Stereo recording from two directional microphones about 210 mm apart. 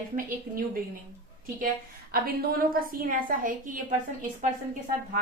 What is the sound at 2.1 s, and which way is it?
A woman's voice, 45° right (ahead or behind).